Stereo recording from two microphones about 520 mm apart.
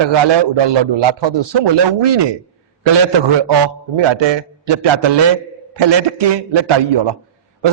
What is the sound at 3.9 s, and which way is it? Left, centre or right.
A man's voice, right.